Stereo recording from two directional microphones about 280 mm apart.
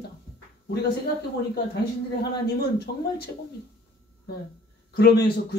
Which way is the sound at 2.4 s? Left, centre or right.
Left.